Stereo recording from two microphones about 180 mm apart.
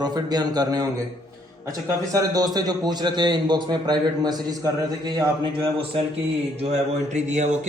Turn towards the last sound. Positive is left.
turn(degrees=-40)  # may be behind; listen again after turning